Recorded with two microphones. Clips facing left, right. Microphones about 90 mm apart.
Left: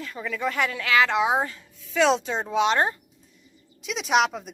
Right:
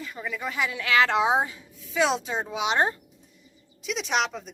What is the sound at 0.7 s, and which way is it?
Speech, 25° right (ahead or behind).